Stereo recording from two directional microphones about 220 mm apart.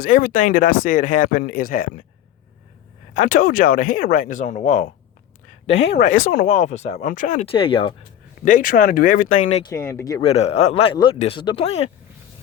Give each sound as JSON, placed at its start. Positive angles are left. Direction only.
{"t": 0.0, "sound": "speech", "side_deg": 35}
{"t": 3.2, "sound": "speech", "side_deg": 35}
{"t": 5.6, "sound": "speech", "side_deg": 55}
{"t": 6.1, "sound": "speech", "side_deg": 35}
{"t": 8.4, "sound": "speech", "side_deg": 35}
{"t": 9.6, "sound": "a man's voice", "side_deg": 15}